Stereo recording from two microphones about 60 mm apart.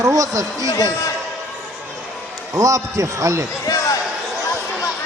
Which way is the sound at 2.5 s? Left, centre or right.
Right.